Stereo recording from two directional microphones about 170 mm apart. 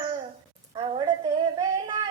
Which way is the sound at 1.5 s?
20° right (ahead or behind).